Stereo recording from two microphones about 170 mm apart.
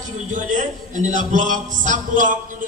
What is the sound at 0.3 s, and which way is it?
A man's voice, 50° right (ahead or behind).